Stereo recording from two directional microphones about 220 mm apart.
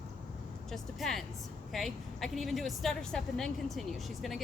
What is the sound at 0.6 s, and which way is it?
A woman's voice, centre (ahead or behind).